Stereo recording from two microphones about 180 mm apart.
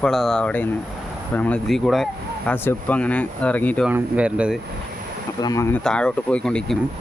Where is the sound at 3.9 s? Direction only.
5° right (ahead or behind).